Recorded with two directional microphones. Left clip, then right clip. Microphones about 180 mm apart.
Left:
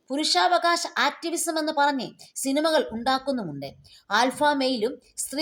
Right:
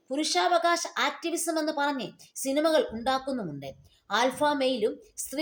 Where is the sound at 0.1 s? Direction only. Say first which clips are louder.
Left 4 dB; 35° left (ahead or behind).